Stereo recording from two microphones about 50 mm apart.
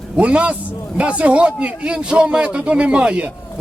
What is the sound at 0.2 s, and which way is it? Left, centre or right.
A man's voice, right.